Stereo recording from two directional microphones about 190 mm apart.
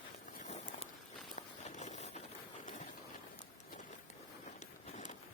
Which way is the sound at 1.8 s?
40° left (ahead or behind).